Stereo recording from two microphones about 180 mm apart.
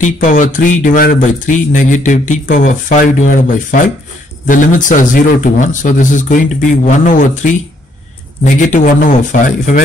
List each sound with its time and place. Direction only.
0.0 s speech: 45° left (ahead or behind)